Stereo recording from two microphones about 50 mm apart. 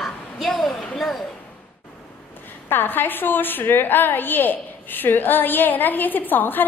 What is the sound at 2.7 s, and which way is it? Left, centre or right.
A woman's voice, left.